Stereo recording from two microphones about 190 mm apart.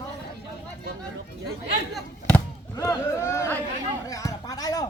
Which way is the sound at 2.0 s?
5° left (ahead or behind).